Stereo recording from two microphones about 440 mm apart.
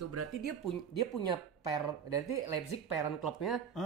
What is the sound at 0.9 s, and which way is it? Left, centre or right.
Speech, left.